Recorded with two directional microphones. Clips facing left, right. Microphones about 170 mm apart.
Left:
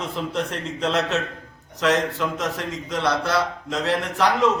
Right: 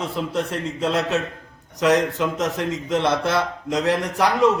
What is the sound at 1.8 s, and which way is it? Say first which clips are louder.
Speech: right 3 dB; 15° right (ahead or behind).